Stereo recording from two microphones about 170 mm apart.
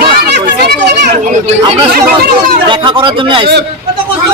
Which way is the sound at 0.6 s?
80° right.